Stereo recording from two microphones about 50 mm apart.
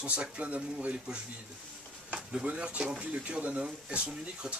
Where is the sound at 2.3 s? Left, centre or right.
Right.